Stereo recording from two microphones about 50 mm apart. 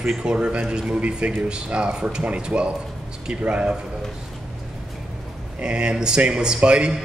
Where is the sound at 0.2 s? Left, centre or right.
Centre.